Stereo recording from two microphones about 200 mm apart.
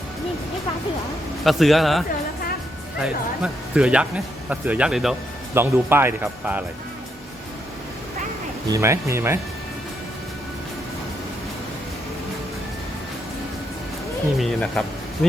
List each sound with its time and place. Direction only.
1.5 s speech: centre (ahead or behind)
8.6 s speech: 15° right (ahead or behind)
14.3 s speech: 5° left (ahead or behind)